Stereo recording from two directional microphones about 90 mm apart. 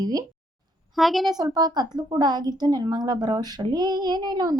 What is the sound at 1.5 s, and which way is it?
Speech, 50° right (ahead or behind).